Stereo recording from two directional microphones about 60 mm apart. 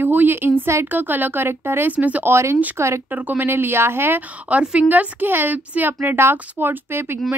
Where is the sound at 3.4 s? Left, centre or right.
Right.